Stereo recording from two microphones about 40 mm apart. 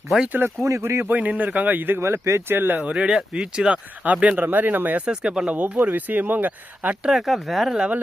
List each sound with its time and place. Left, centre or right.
0.4 s speech: right
1.1 s speech: right
2.9 s speech: right
4.4 s speech: right
5.0 s speech: right
5.5 s speech: right
7.1 s speech: centre